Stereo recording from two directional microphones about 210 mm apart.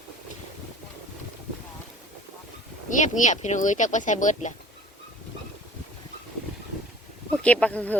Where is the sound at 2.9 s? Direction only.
35° left (ahead or behind).